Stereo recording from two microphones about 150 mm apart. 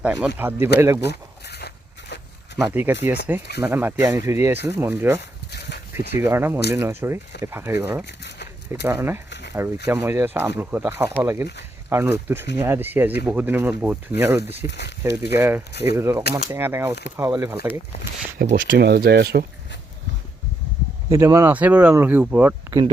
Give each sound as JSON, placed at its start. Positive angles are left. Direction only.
{"t": 0.0, "sound": "speech", "side_deg": -10}
{"t": 1.0, "sound": "a sound", "side_deg": 90}
{"t": 2.6, "sound": "speech", "side_deg": -10}
{"t": 5.5, "sound": "a sound", "side_deg": 90}
{"t": 5.9, "sound": "speech", "side_deg": -15}
{"t": 18.3, "sound": "speech", "side_deg": -90}
{"t": 21.1, "sound": "speech", "side_deg": -20}